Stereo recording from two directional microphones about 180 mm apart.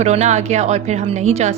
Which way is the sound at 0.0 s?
40° right (ahead or behind).